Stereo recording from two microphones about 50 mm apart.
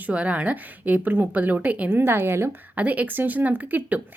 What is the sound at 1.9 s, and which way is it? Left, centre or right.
Speech, right.